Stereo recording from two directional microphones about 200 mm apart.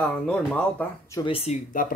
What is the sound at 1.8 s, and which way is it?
Speech, 45° left (ahead or behind).